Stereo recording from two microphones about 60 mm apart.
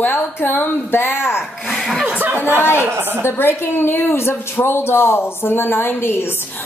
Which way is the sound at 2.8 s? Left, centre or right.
Right.